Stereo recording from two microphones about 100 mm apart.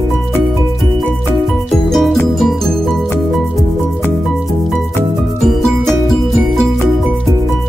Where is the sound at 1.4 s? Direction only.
Centre (ahead or behind).